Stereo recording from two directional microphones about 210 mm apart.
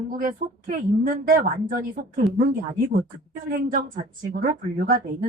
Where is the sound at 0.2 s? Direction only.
40° right (ahead or behind).